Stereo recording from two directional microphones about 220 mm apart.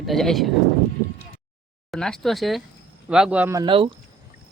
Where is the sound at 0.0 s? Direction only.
Centre (ahead or behind).